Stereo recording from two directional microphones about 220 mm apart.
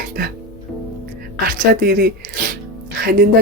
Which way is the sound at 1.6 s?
45° right (ahead or behind).